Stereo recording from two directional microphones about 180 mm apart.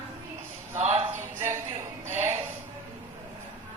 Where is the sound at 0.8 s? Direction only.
35° right (ahead or behind).